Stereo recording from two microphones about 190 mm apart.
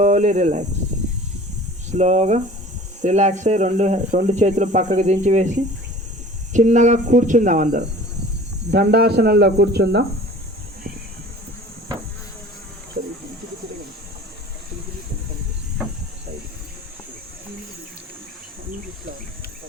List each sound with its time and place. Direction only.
0.0 s speech: 40° right (ahead or behind)
1.9 s speech: 40° right (ahead or behind)
6.5 s speech: 40° right (ahead or behind)
8.7 s speech: 55° right (ahead or behind)